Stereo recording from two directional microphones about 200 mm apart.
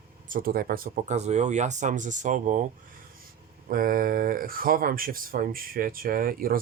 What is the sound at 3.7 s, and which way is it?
Speech, 45° right (ahead or behind).